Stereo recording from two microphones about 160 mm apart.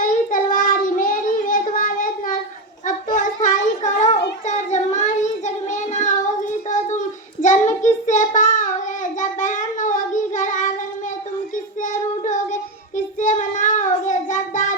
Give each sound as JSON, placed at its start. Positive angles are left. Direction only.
{"t": 0.0, "sound": "child singing", "side_deg": 55}
{"t": 2.8, "sound": "a sound", "side_deg": 55}
{"t": 4.4, "sound": "child singing", "side_deg": 45}